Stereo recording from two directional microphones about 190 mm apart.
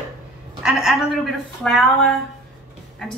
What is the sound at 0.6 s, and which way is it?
Speech, centre (ahead or behind).